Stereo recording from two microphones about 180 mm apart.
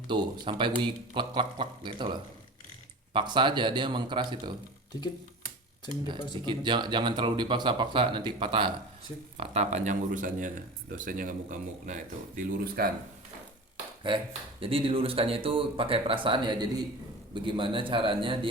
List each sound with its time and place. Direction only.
0.1 s speech: 25° right (ahead or behind)
6.1 s speech: 25° left (ahead or behind)
6.4 s speech: 25° right (ahead or behind); by 12.9 s 50° right (ahead or behind)
14.6 s speech: 30° right (ahead or behind)